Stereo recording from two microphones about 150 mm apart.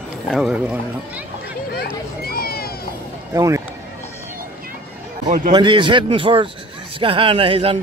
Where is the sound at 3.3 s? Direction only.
20° right (ahead or behind).